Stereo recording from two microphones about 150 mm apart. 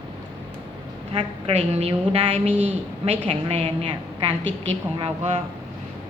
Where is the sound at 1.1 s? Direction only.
40° right (ahead or behind).